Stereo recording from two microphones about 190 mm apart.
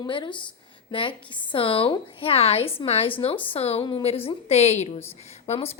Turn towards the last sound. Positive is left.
turn(degrees=35)  # may be behind; listen again after turning